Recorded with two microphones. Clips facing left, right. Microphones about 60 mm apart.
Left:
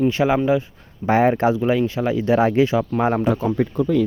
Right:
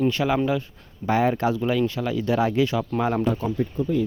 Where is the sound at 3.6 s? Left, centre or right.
Left.